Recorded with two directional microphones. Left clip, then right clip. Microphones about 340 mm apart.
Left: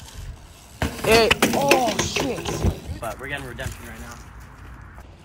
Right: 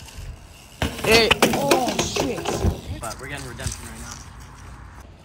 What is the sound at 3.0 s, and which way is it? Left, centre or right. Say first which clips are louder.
Speech: left 4 dB; centre.